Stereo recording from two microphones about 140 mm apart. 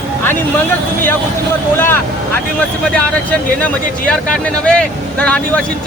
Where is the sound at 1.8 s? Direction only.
15° left (ahead or behind).